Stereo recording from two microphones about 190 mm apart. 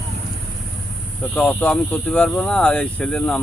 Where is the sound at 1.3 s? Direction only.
10° left (ahead or behind).